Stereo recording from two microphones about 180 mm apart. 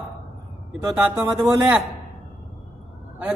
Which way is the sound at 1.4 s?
5° right (ahead or behind).